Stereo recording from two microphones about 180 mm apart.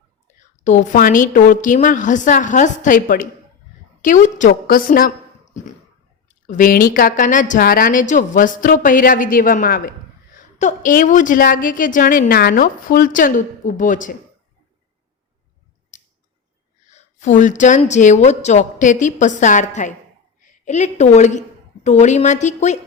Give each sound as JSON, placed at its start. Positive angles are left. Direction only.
{"t": 0.3, "sound": "a woman's voice", "side_deg": 40}
{"t": 6.2, "sound": "a woman's voice", "side_deg": 45}
{"t": 16.9, "sound": "a woman's voice", "side_deg": 40}